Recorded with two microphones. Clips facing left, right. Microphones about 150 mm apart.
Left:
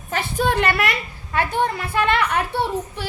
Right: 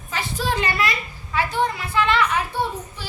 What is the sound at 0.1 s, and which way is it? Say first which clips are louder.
A child's voice: left 4 dB; 55° left (ahead or behind).